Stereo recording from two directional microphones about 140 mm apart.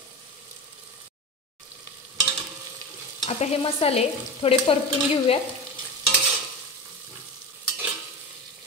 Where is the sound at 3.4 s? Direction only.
45° left (ahead or behind).